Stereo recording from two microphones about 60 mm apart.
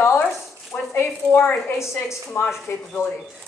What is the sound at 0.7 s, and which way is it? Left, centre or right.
Speech, centre.